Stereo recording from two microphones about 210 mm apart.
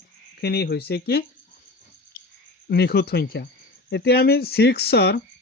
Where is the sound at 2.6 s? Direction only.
50° left (ahead or behind).